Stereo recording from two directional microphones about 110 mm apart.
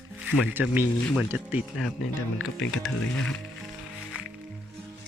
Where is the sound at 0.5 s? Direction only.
20° right (ahead or behind).